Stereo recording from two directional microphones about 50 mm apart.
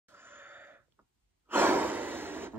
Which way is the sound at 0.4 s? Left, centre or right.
Right.